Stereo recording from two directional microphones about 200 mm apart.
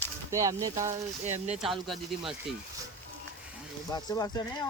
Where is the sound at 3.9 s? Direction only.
20° left (ahead or behind).